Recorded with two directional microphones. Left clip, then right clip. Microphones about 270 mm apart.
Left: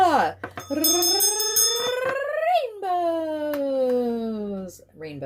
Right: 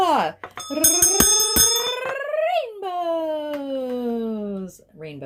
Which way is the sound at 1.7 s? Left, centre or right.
Right.